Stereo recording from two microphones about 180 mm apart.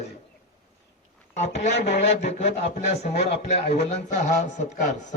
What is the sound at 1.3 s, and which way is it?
Speech, 40° left (ahead or behind).